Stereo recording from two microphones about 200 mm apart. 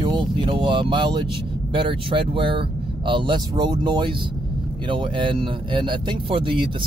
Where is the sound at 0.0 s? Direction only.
25° right (ahead or behind).